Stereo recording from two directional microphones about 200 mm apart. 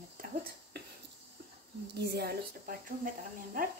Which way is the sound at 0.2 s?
45° right (ahead or behind).